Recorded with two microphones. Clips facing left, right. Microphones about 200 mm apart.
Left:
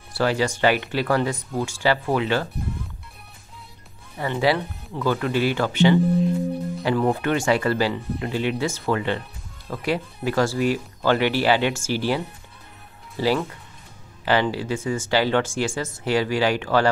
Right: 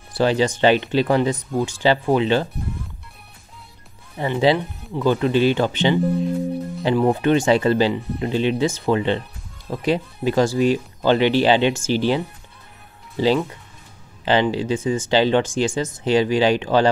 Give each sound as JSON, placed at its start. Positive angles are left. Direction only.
{"t": 0.1, "sound": "speech", "side_deg": -20}
{"t": 4.2, "sound": "speech", "side_deg": -20}
{"t": 13.2, "sound": "speech", "side_deg": -20}